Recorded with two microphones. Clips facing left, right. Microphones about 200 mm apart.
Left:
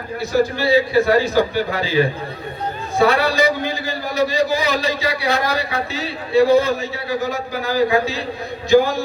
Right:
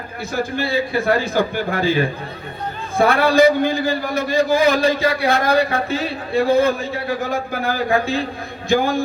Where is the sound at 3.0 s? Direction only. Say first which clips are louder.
Right 3 dB; 55° right (ahead or behind).